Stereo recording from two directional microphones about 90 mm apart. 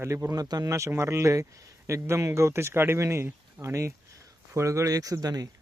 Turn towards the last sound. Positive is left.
turn(degrees=-45)  # may be behind; listen again after turning